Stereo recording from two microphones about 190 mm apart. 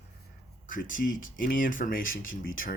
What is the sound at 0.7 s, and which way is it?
Speech, 45° left (ahead or behind).